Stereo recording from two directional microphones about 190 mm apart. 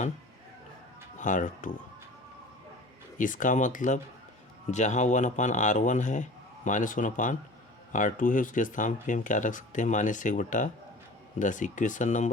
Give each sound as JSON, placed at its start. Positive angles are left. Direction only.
{"t": 1.2, "sound": "speech", "side_deg": 40}
{"t": 3.2, "sound": "speech", "side_deg": 45}